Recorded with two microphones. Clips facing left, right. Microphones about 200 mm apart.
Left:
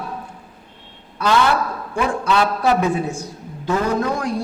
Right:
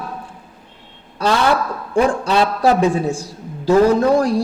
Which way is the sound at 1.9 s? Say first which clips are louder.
Right 4 dB; 30° right (ahead or behind).